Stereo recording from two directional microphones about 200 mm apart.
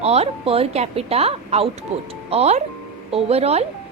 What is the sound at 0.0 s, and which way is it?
A woman's voice, 30° right (ahead or behind).